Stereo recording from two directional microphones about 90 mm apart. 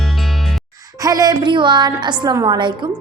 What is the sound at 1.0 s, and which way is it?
A woman's voice, 40° right (ahead or behind).